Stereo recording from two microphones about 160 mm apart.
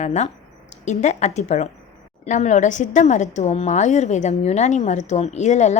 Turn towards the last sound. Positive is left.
turn(degrees=45)  # may be behind; listen again after turning